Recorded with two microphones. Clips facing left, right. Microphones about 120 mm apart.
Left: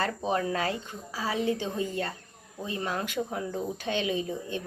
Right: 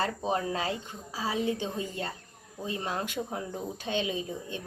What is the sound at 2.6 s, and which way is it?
Speech, 25° right (ahead or behind).